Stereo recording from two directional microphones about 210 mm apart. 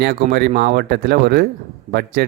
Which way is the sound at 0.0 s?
45° right (ahead or behind).